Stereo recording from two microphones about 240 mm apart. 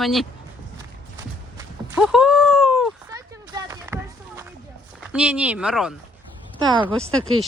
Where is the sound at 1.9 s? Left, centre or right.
Centre.